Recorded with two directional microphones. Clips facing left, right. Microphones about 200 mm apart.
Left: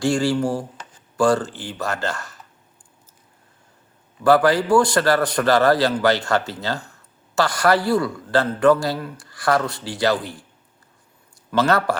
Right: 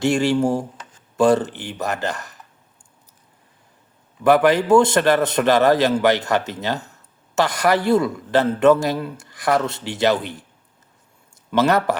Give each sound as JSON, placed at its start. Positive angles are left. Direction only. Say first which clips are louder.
{"t": 0.0, "sound": "a man's voice", "louder": "right 2 dB", "side_deg": -20}
{"t": 4.2, "sound": "a man's voice", "louder": "right 1 dB", "side_deg": -20}
{"t": 11.5, "sound": "a man's voice", "louder": "right 1 dB", "side_deg": -20}